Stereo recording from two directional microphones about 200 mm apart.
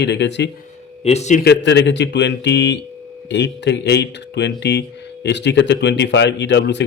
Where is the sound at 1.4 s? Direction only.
60° left (ahead or behind).